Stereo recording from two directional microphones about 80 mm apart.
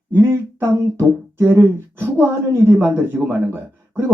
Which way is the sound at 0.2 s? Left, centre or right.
Right.